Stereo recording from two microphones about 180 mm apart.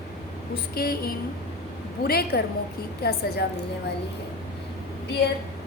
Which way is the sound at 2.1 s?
60° left (ahead or behind).